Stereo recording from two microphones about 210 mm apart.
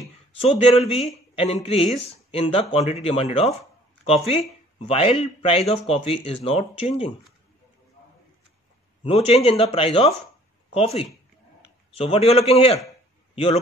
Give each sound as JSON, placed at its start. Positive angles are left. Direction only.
{"t": 0.4, "sound": "speech", "side_deg": 30}
{"t": 9.0, "sound": "a man's voice", "side_deg": 25}